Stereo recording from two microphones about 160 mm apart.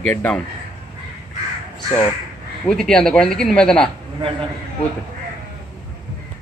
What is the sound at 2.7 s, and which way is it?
Speech, 5° left (ahead or behind).